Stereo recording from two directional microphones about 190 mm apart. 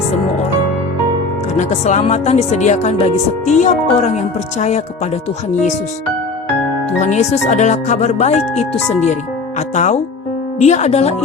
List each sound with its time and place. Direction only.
1.5 s speech: 40° left (ahead or behind)
7.0 s speech: 35° left (ahead or behind)
9.7 s speech: 40° left (ahead or behind)